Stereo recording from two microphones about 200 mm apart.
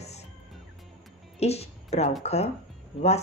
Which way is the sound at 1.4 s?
30° left (ahead or behind).